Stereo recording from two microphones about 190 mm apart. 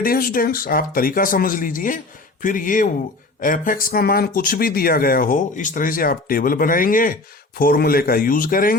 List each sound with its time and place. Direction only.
0.0 s speech: 50° left (ahead or behind)